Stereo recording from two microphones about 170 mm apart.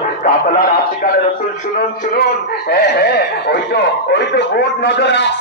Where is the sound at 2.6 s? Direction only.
65° left (ahead or behind).